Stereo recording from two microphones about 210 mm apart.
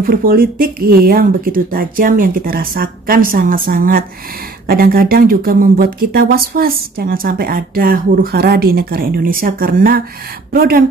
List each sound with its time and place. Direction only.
0.0 s speech: 45° right (ahead or behind)